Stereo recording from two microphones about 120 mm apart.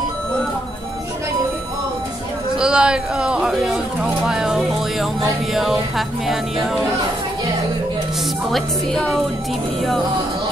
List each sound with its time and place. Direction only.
2.6 s a sound: 5° right (ahead or behind)
5.5 s music: centre (ahead or behind)
8.5 s music: 5° left (ahead or behind)